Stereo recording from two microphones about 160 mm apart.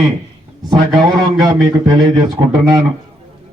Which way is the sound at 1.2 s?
25° right (ahead or behind).